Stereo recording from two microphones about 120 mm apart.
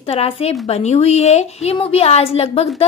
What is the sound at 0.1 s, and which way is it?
A woman's voice, 60° left (ahead or behind).